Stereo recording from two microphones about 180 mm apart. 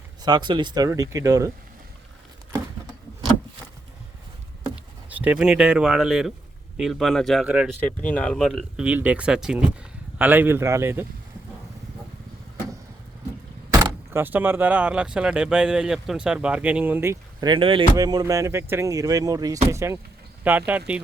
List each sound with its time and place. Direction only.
0.2 s speech: 25° right (ahead or behind)
4.7 s speech: 10° right (ahead or behind)
7.8 s speech: 10° left (ahead or behind); by 11.0 s 15° right (ahead or behind)
14.1 s speech: 10° right (ahead or behind)
17.4 s speech: 30° right (ahead or behind); by 21.0 s 10° right (ahead or behind)